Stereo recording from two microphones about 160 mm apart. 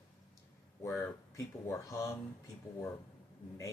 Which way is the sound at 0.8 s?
15° left (ahead or behind).